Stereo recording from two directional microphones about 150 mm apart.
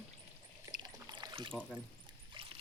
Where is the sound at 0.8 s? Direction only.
30° right (ahead or behind).